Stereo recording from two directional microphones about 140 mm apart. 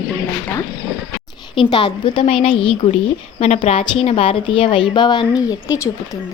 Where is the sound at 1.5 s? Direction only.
35° left (ahead or behind).